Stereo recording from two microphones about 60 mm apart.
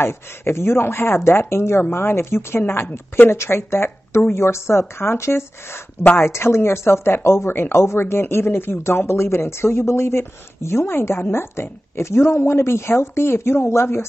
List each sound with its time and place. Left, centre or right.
0.0 s speech: left